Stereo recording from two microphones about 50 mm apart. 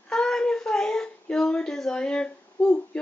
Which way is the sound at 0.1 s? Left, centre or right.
Centre.